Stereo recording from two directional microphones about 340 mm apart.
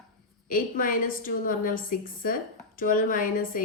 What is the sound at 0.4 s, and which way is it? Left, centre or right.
A woman's voice, left.